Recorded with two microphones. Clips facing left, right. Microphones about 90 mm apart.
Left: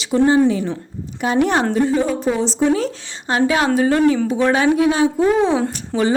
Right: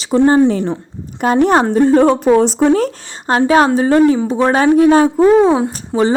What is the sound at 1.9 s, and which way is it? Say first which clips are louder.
Speech: right 8 dB; 70° right (ahead or behind).